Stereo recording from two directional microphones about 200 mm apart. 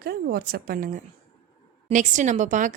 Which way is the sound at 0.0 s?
50° right (ahead or behind).